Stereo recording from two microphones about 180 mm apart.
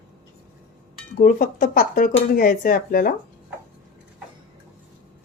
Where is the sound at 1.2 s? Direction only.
50° left (ahead or behind).